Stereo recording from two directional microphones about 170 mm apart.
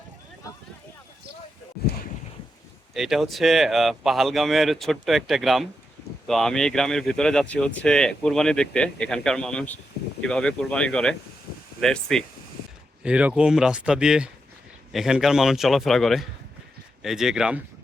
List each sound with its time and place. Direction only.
2.9 s speech: centre (ahead or behind)